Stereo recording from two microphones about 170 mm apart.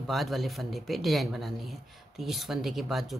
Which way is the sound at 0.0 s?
Centre (ahead or behind).